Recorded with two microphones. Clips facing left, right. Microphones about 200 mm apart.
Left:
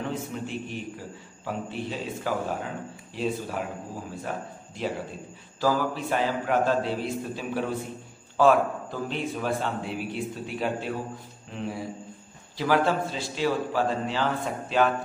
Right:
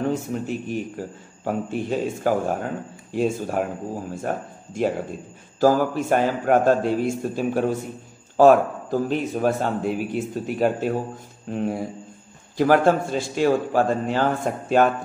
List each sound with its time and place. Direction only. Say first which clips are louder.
0.1 s a man's voice: right 6 dB; 45° right (ahead or behind)